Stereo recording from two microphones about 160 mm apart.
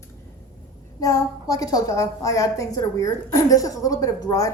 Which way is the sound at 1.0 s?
20° left (ahead or behind).